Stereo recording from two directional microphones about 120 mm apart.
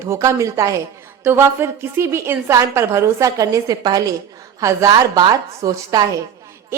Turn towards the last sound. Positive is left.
turn(degrees=-30)  # may be behind; listen again after turning